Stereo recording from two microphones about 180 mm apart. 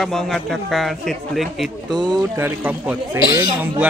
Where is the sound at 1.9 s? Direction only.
20° right (ahead or behind).